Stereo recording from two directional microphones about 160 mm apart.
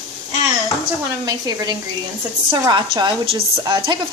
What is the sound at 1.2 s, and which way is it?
A woman's voice, 25° right (ahead or behind).